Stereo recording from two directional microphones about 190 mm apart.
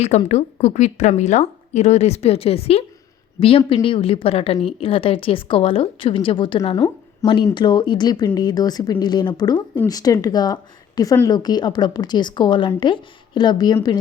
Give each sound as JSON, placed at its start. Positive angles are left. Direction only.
{"t": 0.3, "sound": "a woman's voice", "side_deg": 35}